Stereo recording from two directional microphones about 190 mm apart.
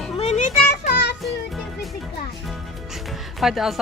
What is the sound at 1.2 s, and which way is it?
Music, centre (ahead or behind).